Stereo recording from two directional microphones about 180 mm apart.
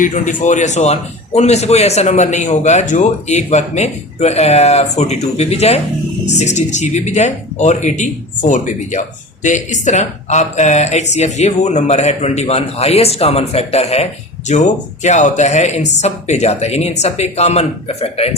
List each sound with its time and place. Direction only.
0.0 s speech: 45° left (ahead or behind)